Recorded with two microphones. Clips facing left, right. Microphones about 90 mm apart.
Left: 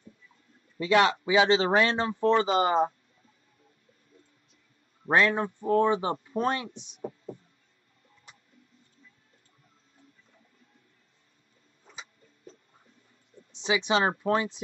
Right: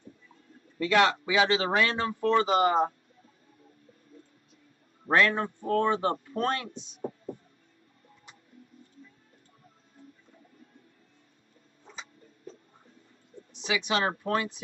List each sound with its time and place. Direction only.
0.7 s a man's voice: 25° left (ahead or behind)
5.1 s a man's voice: 20° left (ahead or behind)
7.0 s heart sounds: centre (ahead or behind)
13.5 s a man's voice: 25° left (ahead or behind)